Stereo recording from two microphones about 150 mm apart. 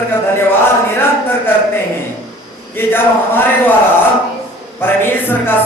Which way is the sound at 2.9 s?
15° left (ahead or behind).